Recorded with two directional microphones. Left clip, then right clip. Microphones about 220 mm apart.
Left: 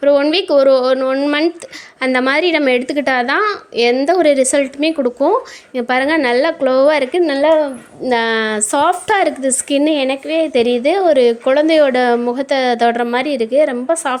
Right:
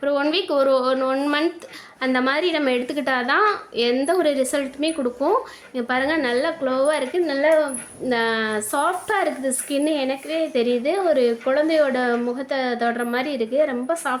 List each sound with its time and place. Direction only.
0.0 s a woman's voice: 30° left (ahead or behind)